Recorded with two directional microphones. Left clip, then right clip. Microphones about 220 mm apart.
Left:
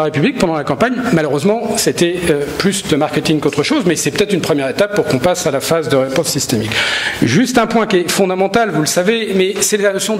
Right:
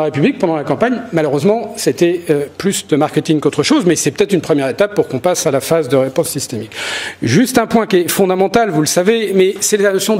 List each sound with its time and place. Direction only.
0.0 s a man's voice: 50° left (ahead or behind)
1.9 s speech: 20° left (ahead or behind)
2.6 s speech: centre (ahead or behind); by 6.2 s 30° left (ahead or behind)
7.2 s speech: 30° left (ahead or behind)
9.0 s a man's voice: 10° left (ahead or behind)